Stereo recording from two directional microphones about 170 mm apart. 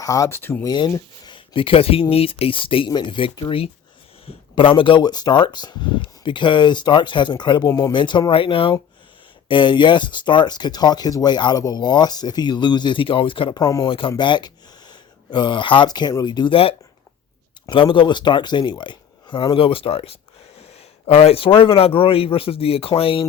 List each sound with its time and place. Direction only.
0.0 s speech: 20° left (ahead or behind)
7.7 s speech: 15° left (ahead or behind)
7.9 s speech: 25° left (ahead or behind)